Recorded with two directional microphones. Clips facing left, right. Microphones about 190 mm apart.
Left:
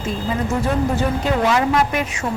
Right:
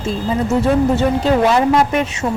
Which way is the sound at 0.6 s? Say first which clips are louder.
Right 6 dB; 30° right (ahead or behind).